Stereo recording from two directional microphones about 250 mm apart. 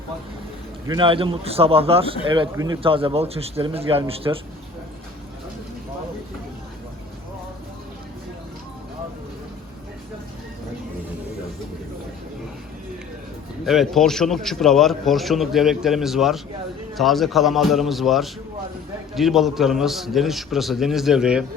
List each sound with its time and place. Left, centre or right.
0.9 s a man's voice: centre
13.7 s a man's voice: centre